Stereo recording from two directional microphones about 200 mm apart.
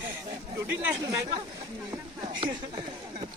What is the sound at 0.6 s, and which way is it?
Speech, 10° right (ahead or behind).